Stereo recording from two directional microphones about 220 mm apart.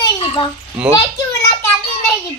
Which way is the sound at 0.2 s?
25° left (ahead or behind).